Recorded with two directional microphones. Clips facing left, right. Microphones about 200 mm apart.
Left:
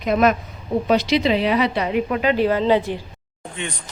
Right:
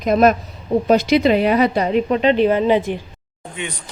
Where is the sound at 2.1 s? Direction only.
25° right (ahead or behind).